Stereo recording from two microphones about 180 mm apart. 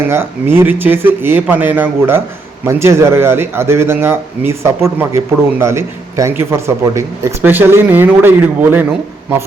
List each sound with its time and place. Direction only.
0.1 s speech: 10° right (ahead or behind)